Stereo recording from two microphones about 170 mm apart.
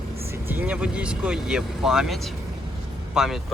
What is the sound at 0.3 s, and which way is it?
Speech, 10° right (ahead or behind).